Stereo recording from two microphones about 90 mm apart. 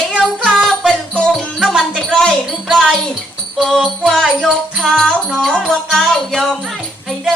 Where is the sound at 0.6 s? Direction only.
Centre (ahead or behind).